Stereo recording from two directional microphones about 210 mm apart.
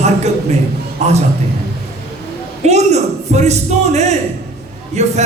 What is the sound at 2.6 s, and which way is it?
Speech, 30° right (ahead or behind).